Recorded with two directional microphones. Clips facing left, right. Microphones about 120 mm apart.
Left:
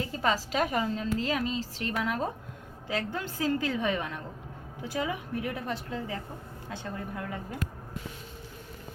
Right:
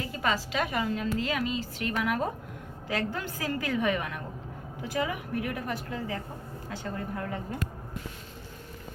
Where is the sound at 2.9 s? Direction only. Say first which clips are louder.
Right 1 dB; 20° left (ahead or behind).